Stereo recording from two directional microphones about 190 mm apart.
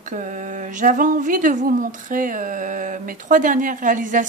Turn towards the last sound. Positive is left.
turn(degrees=-45)  # may be behind; listen again after turning